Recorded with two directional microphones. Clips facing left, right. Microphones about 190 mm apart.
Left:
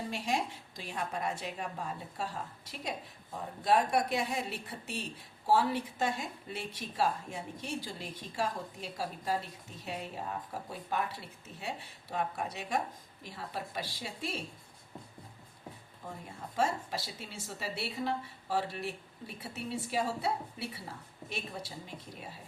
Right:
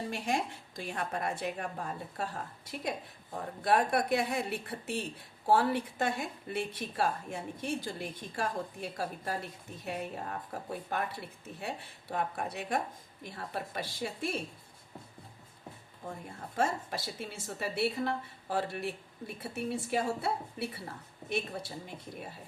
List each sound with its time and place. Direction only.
0.1 s a woman's voice: 55° right (ahead or behind)
16.6 s a woman's voice: 55° right (ahead or behind)